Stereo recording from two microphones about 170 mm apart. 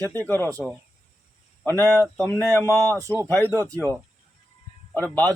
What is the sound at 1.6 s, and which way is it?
Speech, 15° left (ahead or behind).